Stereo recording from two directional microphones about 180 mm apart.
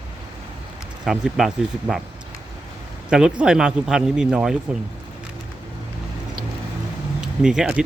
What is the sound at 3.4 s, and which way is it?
A man's voice, 5° right (ahead or behind).